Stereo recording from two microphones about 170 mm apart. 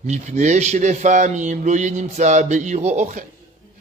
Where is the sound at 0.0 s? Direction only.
45° right (ahead or behind).